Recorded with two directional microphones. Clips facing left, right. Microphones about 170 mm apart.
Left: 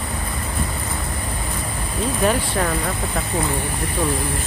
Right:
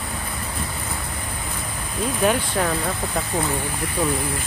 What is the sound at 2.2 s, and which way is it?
Speech, centre (ahead or behind).